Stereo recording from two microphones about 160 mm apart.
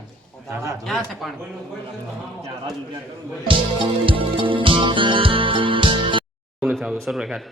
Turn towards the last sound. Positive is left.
turn(degrees=0)  # may be behind; listen again after turning